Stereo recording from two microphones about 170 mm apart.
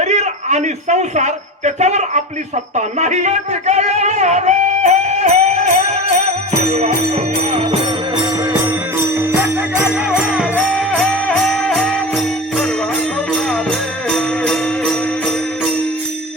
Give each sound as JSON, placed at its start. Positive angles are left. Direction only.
{"t": 0.0, "sound": "a man's voice", "side_deg": -40}
{"t": 6.7, "sound": "music", "side_deg": -40}
{"t": 9.4, "sound": "music", "side_deg": -5}
{"t": 14.1, "sound": "music", "side_deg": 5}